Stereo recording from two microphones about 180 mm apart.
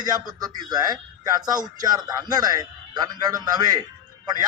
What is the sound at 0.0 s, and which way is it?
A man's voice, 20° right (ahead or behind).